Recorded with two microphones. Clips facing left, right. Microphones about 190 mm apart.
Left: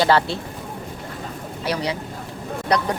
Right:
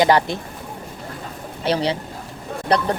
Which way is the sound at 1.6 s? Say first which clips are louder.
Right 4 dB; 30° right (ahead or behind).